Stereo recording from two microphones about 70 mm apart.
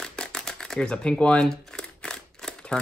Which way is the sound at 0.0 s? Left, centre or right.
Centre.